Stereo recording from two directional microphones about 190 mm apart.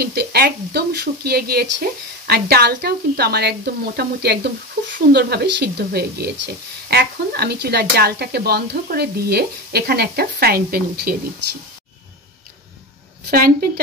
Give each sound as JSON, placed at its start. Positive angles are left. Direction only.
{"t": 0.0, "sound": "speech", "side_deg": -55}
{"t": 13.3, "sound": "a woman's voice", "side_deg": -50}